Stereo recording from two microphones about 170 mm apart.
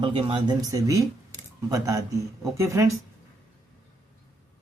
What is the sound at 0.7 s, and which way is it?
Speech, 20° right (ahead or behind).